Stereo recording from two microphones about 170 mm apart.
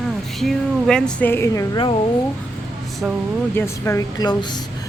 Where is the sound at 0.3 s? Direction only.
Centre (ahead or behind); by 2.0 s 25° left (ahead or behind).